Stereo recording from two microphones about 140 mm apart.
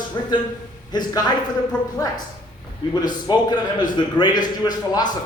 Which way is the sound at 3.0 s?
30° left (ahead or behind).